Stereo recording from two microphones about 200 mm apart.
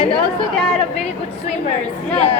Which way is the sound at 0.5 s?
Centre (ahead or behind).